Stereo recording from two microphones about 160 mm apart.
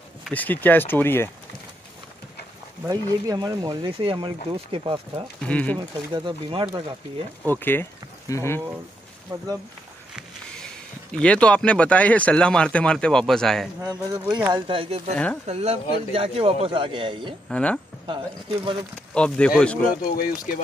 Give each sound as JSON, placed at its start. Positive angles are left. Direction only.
{"t": 0.3, "sound": "speech", "side_deg": 10}
{"t": 2.8, "sound": "speech", "side_deg": -25}
{"t": 3.8, "sound": "a man's voice", "side_deg": -35}
{"t": 5.4, "sound": "speech", "side_deg": 10}
{"t": 5.9, "sound": "speech", "side_deg": -30}
{"t": 7.4, "sound": "speech", "side_deg": 10}
{"t": 10.1, "sound": "speech", "side_deg": 5}
{"t": 13.7, "sound": "speech", "side_deg": -20}
{"t": 14.5, "sound": "a man's voice", "side_deg": -35}
{"t": 17.5, "sound": "speech", "side_deg": 5}
{"t": 19.1, "sound": "speech", "side_deg": 5}
{"t": 20.0, "sound": "speech", "side_deg": 60}